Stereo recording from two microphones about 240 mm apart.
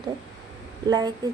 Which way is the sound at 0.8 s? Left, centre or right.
Centre.